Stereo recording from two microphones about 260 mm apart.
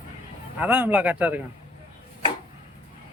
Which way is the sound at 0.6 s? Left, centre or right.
Centre.